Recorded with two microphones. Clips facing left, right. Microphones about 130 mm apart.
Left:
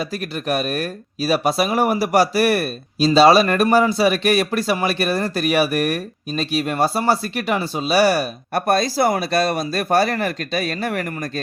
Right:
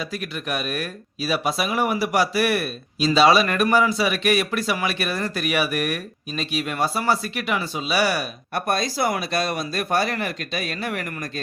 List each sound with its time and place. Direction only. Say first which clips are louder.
0.0 s speech: left 4 dB; 40° left (ahead or behind)